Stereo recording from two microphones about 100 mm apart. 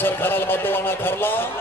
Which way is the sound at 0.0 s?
20° left (ahead or behind).